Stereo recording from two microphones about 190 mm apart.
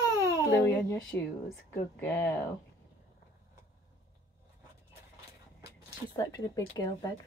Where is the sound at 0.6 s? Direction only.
15° left (ahead or behind).